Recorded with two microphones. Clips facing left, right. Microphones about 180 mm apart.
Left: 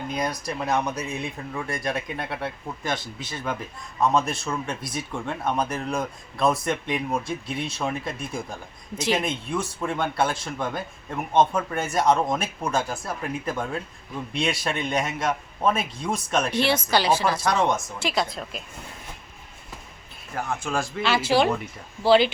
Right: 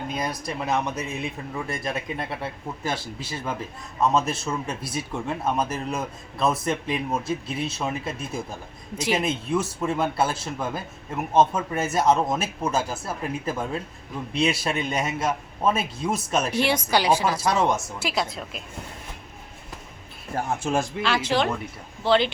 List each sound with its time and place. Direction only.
0.1 s speech: 5° right (ahead or behind)
20.3 s speech: 35° right (ahead or behind)
21.0 s speech: 5° left (ahead or behind)